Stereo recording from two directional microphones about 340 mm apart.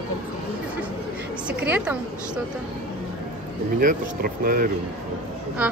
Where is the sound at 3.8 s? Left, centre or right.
Right.